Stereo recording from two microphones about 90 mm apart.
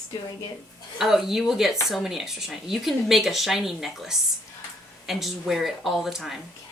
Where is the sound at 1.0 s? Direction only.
5° right (ahead or behind).